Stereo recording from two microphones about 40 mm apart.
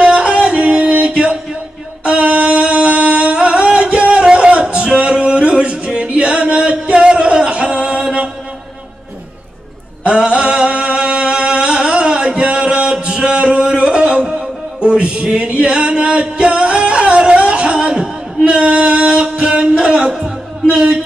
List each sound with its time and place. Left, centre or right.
0.0 s music: right
10.0 s chant: right
14.2 s music: centre
14.8 s male singing: right
16.3 s music: right